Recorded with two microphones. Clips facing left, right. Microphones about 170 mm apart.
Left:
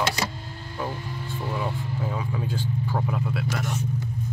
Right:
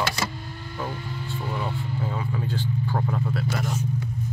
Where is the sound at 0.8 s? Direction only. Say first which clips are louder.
Left 1 dB; 10° left (ahead or behind).